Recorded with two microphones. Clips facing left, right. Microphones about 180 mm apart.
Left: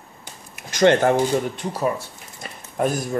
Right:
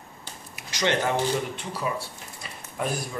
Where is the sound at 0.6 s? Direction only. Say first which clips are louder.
Left 9 dB; 50° left (ahead or behind).